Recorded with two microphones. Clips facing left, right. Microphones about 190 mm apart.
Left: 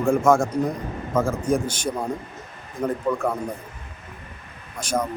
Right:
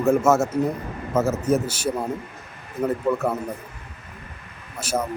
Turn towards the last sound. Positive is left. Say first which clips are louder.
# left 1 dB
turn(degrees=-5)  # may be behind; listen again after turning